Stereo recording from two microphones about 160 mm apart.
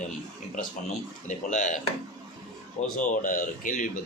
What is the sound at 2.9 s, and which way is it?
Speech, 55° left (ahead or behind).